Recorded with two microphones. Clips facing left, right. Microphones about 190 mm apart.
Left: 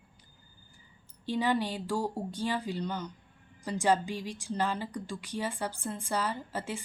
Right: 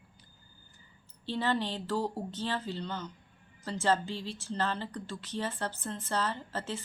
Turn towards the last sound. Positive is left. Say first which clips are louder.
# left 1 dB
turn(degrees=10)  # may be behind; listen again after turning